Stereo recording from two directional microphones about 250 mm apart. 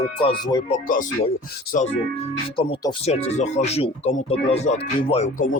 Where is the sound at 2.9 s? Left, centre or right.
Left.